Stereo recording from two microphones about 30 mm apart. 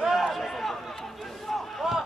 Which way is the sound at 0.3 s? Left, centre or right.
Centre.